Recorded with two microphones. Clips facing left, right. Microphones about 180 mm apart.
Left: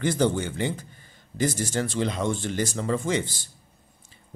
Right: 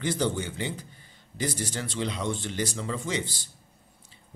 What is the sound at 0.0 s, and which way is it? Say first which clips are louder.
Speech: left 4 dB; 50° left (ahead or behind).